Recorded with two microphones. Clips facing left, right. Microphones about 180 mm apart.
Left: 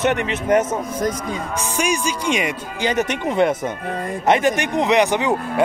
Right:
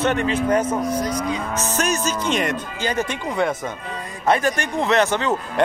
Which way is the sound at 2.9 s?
20° left (ahead or behind).